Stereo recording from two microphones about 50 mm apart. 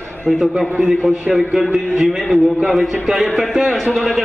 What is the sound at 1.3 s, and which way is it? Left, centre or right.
A man's voice, centre.